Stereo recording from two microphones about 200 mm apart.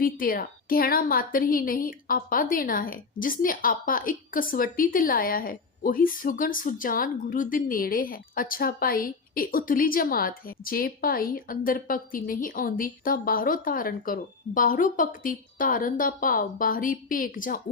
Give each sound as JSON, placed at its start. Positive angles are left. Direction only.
{"t": 0.0, "sound": "a woman's voice", "side_deg": 45}